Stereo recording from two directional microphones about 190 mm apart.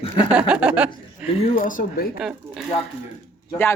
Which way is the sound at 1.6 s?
45° left (ahead or behind).